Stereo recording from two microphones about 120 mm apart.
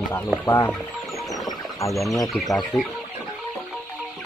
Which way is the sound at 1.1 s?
Centre (ahead or behind).